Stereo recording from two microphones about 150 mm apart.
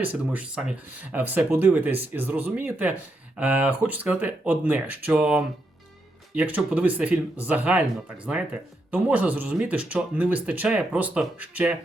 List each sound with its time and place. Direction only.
0.0 s speech: 10° right (ahead or behind)